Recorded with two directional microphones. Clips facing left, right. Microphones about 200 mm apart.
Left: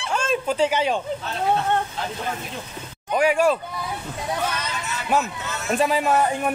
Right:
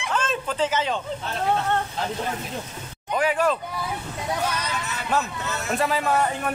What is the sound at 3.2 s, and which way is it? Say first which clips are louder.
Speech: left 3 dB; 10° left (ahead or behind).